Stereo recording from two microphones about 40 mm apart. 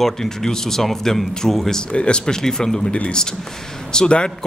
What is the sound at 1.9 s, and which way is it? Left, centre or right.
A man's voice, left.